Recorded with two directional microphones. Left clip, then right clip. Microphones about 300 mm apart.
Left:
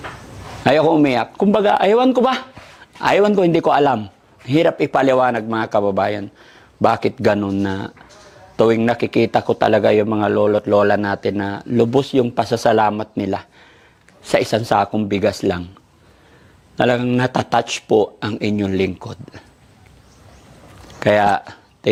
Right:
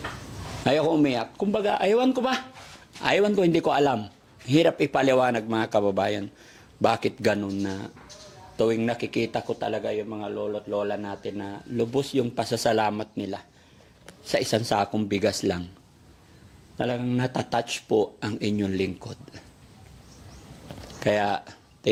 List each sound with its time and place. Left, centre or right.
0.6 s a man's voice: left
7.4 s speech: left
9.5 s speech: left
10.7 s speech: left; by 13.1 s centre
13.1 s speech: left
14.7 s a man's voice: centre
16.7 s speech: left
17.1 s a man's voice: left
21.0 s a sound: left